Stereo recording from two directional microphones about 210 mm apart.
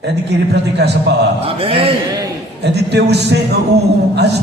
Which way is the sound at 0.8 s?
50° right (ahead or behind).